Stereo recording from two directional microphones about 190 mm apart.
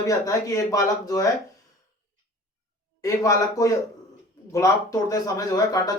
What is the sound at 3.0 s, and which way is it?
Speech, 15° left (ahead or behind).